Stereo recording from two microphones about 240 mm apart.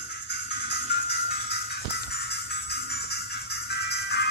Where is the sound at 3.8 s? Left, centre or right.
Left.